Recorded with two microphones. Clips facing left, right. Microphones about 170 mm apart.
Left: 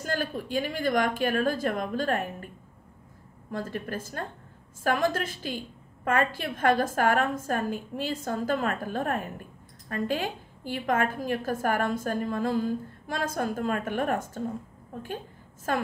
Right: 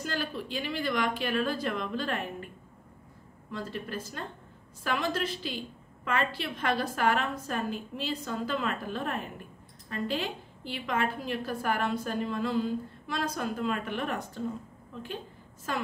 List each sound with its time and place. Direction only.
0.0 s a woman's voice: 50° left (ahead or behind)
3.5 s a woman's voice: 50° left (ahead or behind)
15.7 s a woman's voice: 50° left (ahead or behind)